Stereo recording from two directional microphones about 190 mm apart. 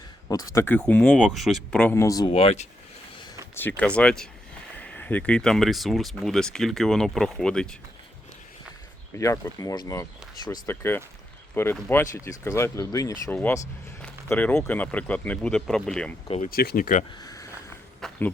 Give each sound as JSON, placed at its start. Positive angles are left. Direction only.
{"t": 0.3, "sound": "speech", "side_deg": 15}
{"t": 2.3, "sound": "speech", "side_deg": 30}
{"t": 3.5, "sound": "speech", "side_deg": 10}
{"t": 9.1, "sound": "speech", "side_deg": 15}
{"t": 16.5, "sound": "speech", "side_deg": 50}
{"t": 17.2, "sound": "a sound", "side_deg": 20}
{"t": 18.0, "sound": "a sound", "side_deg": 5}